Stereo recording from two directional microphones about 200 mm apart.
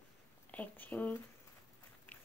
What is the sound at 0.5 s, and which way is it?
Speech, 10° left (ahead or behind).